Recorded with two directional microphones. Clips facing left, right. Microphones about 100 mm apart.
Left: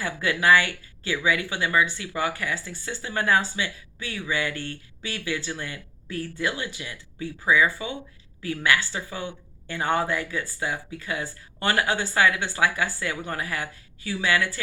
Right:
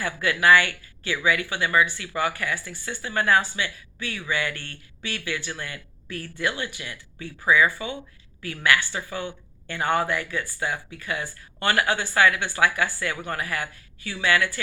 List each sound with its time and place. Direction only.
0.0 s speech: 25° left (ahead or behind)